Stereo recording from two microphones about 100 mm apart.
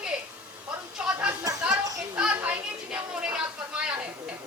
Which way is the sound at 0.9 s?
10° right (ahead or behind).